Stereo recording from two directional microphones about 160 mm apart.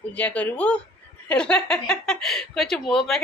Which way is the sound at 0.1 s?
10° left (ahead or behind).